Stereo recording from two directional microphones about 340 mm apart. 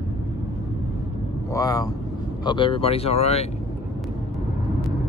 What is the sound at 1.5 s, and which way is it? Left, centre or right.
Speech, centre.